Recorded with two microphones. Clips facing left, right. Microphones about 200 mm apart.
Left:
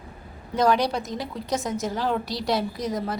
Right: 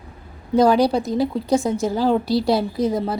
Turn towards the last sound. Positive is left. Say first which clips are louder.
# right 7 dB
turn(degrees=-30)  # may be behind; listen again after turning